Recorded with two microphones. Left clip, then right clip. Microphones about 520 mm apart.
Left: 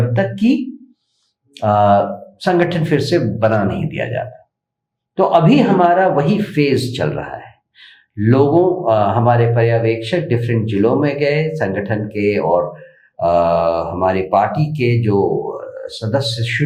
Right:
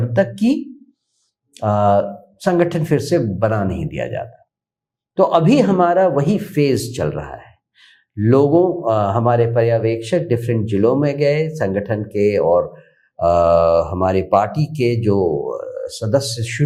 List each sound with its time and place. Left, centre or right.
0.1 s speech: right
1.5 s speech: right